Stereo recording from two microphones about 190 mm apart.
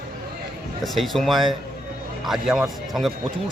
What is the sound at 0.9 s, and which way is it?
A man's voice, centre (ahead or behind).